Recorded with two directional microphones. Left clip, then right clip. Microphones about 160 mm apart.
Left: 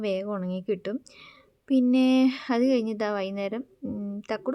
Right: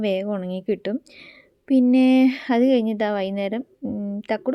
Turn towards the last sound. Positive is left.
turn(degrees=-20)  # may be behind; listen again after turning